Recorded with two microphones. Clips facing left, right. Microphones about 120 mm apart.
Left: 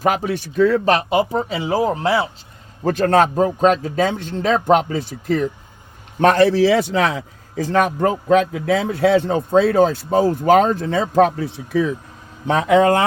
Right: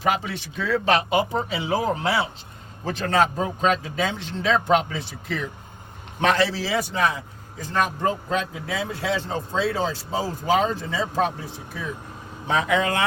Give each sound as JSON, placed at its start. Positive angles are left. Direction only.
{"t": 0.0, "sound": "speech", "side_deg": 45}
{"t": 2.8, "sound": "a man's voice", "side_deg": 50}
{"t": 12.5, "sound": "speech", "side_deg": 50}